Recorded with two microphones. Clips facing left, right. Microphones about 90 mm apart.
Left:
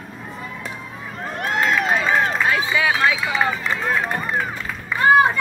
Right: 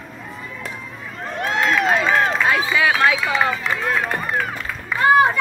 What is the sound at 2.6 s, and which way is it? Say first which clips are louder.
Run: right 2 dB; 20° left (ahead or behind).